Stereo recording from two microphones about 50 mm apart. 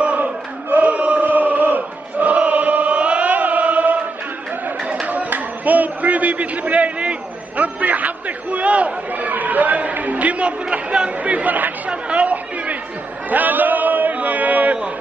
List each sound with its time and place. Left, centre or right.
0.0 s chant: right
5.0 s a man's voice: right
11.9 s chatter: right
13.3 s a sound: right